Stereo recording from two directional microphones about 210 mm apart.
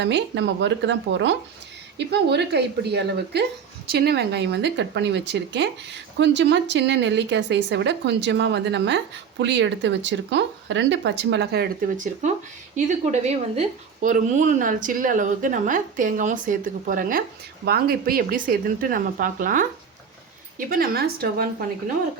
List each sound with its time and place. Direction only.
0.0 s a woman's voice: 55° right (ahead or behind)
13.6 s a woman's voice: 35° right (ahead or behind)